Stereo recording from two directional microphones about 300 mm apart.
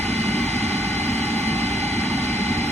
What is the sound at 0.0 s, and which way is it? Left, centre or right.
Vehicle, right.